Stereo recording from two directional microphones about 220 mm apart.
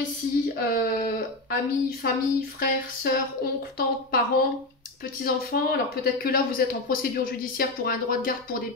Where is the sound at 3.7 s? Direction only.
45° left (ahead or behind).